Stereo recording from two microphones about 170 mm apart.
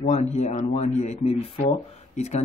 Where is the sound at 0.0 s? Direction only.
40° left (ahead or behind).